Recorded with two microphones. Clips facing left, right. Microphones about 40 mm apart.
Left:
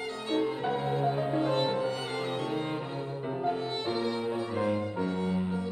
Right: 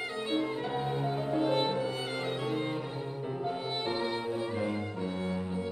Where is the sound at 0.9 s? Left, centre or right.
Centre.